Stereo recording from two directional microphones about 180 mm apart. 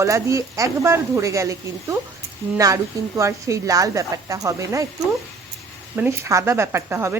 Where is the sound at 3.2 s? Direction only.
15° right (ahead or behind).